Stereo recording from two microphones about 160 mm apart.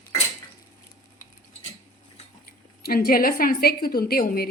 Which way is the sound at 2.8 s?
70° left (ahead or behind).